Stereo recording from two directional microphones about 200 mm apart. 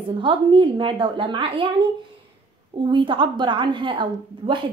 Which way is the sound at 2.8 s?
25° right (ahead or behind).